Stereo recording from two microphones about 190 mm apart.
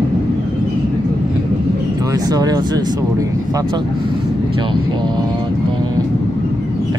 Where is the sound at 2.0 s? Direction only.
20° right (ahead or behind).